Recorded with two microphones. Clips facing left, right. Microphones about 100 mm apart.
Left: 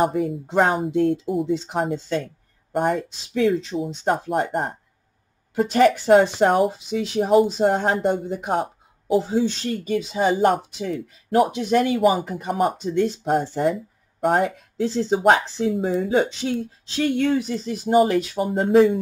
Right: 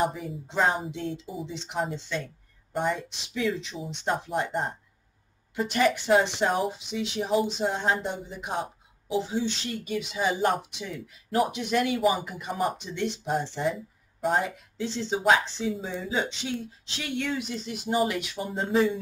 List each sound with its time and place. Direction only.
0.0 s speech: 55° left (ahead or behind)
0.9 s speech: 45° left (ahead or behind)
2.2 s speech: 55° left (ahead or behind)
6.0 s speech: 40° left (ahead or behind)
15.1 s speech: 60° left (ahead or behind)
15.4 s speech: 40° left (ahead or behind)
15.7 s speech: 55° left (ahead or behind)